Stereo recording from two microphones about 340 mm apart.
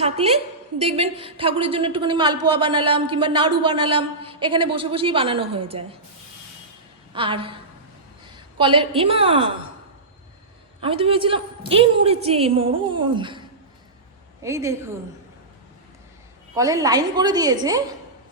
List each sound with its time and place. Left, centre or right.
0.0 s a woman's voice: centre
7.1 s a woman's voice: centre
10.8 s a woman's voice: centre
14.4 s a woman's voice: centre
16.6 s a woman's voice: centre